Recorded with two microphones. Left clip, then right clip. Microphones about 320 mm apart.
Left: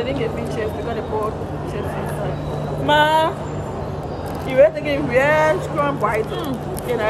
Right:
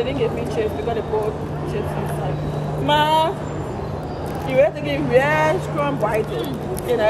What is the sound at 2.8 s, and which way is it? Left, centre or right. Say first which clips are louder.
Speech: left 2 dB; centre.